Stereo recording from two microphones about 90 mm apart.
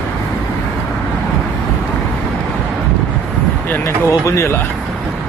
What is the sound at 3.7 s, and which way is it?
Speech, 35° left (ahead or behind).